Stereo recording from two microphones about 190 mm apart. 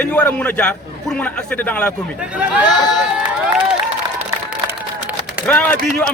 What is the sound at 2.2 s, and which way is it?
Speech, 5° right (ahead or behind).